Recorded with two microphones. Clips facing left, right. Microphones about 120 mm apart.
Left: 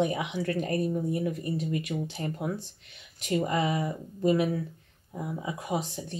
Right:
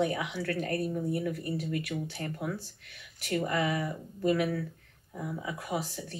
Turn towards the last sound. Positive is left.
turn(degrees=20)  # may be behind; listen again after turning